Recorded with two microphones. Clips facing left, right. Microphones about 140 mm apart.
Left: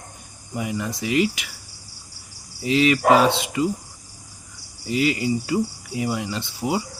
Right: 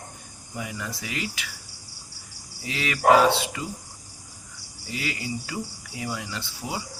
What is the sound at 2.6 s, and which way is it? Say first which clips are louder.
Speech: left 10 dB; 20° left (ahead or behind).